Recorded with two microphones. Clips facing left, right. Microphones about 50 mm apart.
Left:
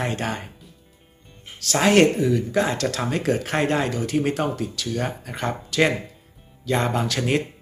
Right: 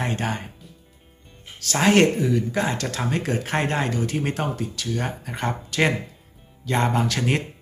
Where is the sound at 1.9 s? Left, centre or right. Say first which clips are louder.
Left 2 dB; right.